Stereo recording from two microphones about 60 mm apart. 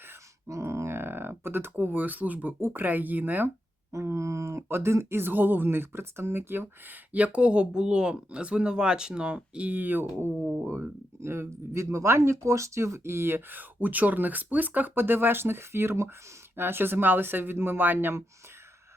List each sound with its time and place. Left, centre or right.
0.4 s speech: right
3.9 s speech: right